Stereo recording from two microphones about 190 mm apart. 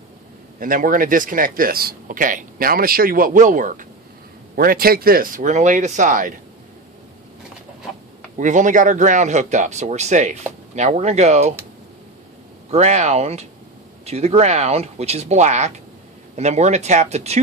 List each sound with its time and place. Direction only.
0.6 s speech: 45° right (ahead or behind)
8.4 s speech: 40° right (ahead or behind)
12.7 s speech: 40° right (ahead or behind)